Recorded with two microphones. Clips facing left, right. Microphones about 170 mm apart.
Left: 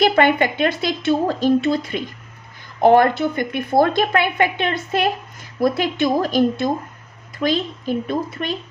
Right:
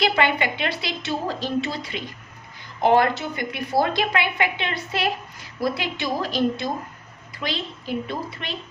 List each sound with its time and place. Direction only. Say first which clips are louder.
0.0 s a woman's voice: left 6 dB; 50° left (ahead or behind)